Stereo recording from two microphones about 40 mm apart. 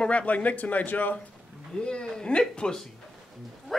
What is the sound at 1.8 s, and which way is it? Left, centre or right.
A man's voice, left.